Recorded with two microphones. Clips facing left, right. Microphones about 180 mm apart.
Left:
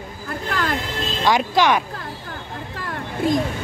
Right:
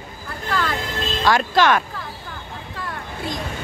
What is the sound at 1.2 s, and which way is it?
Speech, 15° left (ahead or behind).